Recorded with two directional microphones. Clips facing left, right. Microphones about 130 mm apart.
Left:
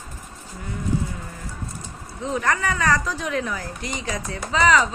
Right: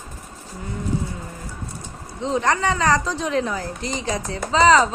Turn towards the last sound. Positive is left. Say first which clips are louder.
# right 4 dB
turn(degrees=-30)  # may be behind; listen again after turning